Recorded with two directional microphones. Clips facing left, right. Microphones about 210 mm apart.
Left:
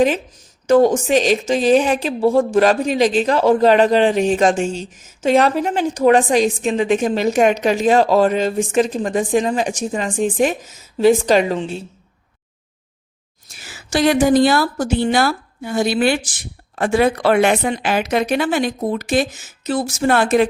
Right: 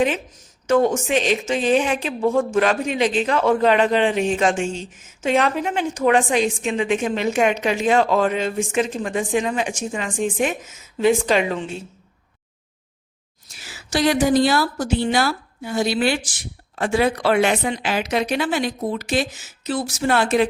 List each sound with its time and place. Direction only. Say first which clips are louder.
0.7 s speech: left 5 dB; 35° left (ahead or behind)
13.6 s a woman's voice: left 3 dB; 50° left (ahead or behind)